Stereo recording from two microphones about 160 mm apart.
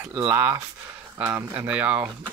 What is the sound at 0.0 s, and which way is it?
Speech, 15° right (ahead or behind).